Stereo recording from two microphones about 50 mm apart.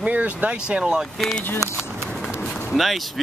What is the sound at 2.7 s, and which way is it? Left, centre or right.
Speech, centre.